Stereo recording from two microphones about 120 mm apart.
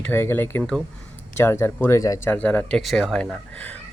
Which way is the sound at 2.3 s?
10° left (ahead or behind).